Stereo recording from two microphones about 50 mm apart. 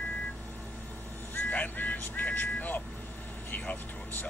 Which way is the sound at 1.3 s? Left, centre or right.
Left.